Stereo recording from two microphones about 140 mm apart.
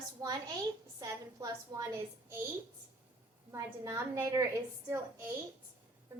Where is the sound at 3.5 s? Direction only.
20° right (ahead or behind).